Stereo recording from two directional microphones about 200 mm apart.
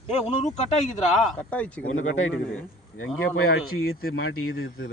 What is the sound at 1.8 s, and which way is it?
Speech, 90° left.